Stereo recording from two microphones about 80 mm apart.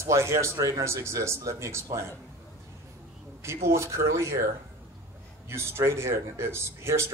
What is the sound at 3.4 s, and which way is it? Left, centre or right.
Speech, right.